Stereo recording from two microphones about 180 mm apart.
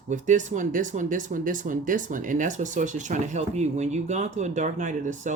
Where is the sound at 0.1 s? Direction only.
45° right (ahead or behind).